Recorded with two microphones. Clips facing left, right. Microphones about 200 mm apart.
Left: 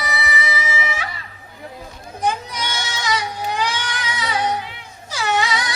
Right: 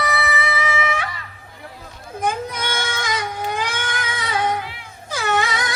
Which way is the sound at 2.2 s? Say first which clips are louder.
Even; 55° right (ahead or behind).